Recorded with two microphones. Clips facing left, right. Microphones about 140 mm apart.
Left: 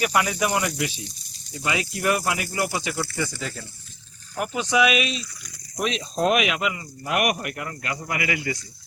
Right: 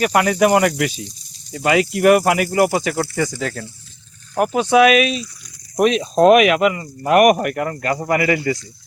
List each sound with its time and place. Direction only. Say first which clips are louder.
0.0 s speech: right 8 dB; 55° right (ahead or behind)
3.2 s speech: right 8 dB; 75° right (ahead or behind)
4.4 s speech: right 8 dB; 50° right (ahead or behind)